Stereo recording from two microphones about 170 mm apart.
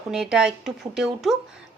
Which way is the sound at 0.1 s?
5° right (ahead or behind).